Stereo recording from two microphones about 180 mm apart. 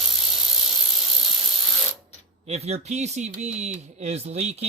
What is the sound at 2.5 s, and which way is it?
Speech, 35° right (ahead or behind).